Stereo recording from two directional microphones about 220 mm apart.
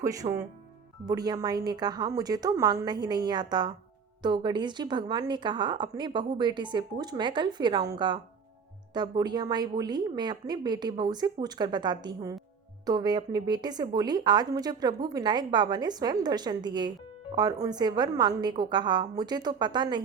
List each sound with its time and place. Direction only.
0.0 s speech: 15° right (ahead or behind)